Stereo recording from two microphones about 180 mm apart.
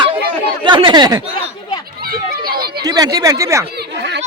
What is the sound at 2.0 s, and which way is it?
Children playing, 55° right (ahead or behind).